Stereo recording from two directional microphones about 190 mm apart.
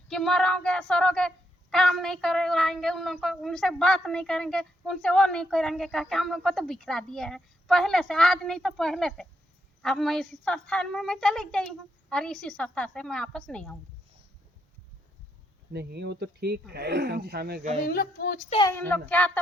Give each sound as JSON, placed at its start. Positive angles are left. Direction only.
{"t": 0.1, "sound": "speech", "side_deg": 5}
{"t": 15.7, "sound": "speech", "side_deg": -60}
{"t": 17.8, "sound": "speech", "side_deg": 50}
{"t": 18.6, "sound": "a child's voice", "side_deg": 10}